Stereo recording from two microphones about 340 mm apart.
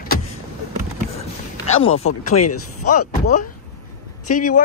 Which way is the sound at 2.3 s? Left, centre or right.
Left.